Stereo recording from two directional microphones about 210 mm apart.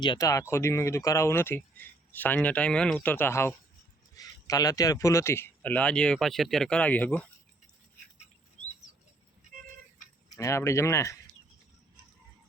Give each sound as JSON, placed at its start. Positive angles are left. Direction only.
{"t": 0.0, "sound": "speech", "side_deg": 20}
{"t": 10.2, "sound": "speech", "side_deg": 15}